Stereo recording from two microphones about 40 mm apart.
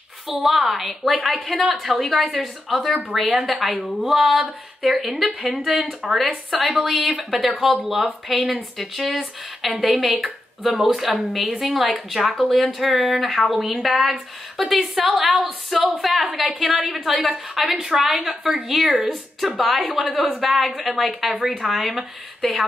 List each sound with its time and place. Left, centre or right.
0.4 s a woman's voice: centre
1.4 s a woman's voice: right
1.8 s a woman's voice: centre
18.4 s a woman's voice: centre
18.7 s a woman's voice: centre